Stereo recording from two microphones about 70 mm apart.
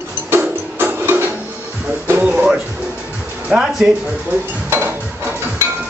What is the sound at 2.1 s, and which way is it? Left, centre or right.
Speech, right.